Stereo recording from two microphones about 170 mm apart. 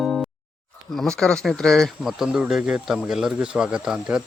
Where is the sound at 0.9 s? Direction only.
5° left (ahead or behind).